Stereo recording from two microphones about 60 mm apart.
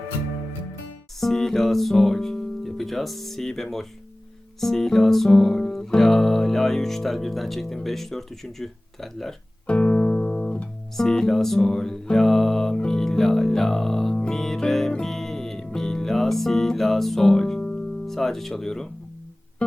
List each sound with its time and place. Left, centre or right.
1.2 s speech: centre
4.6 s music: centre
7.9 s speech: centre
9.6 s music: left